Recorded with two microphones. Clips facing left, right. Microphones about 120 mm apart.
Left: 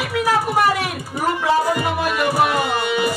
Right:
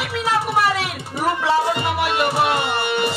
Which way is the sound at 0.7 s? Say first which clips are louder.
Left 1 dB; 25° right (ahead or behind).